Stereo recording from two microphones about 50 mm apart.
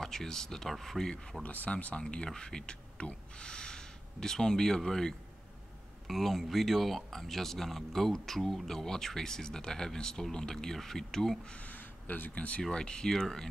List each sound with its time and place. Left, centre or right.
0.0 s speech: centre
1.4 s speech: left
2.0 s speech: centre
11.5 s speech: left
12.7 s speech: centre